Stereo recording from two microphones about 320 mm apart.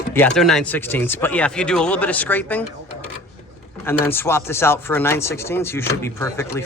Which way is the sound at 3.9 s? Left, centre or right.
Centre.